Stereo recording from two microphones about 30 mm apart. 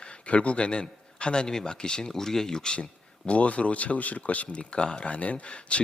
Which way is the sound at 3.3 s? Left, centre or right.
Left.